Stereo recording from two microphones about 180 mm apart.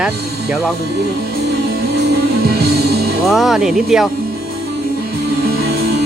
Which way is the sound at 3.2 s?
Centre (ahead or behind).